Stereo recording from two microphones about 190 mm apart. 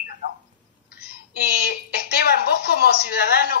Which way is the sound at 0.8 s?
55° left (ahead or behind).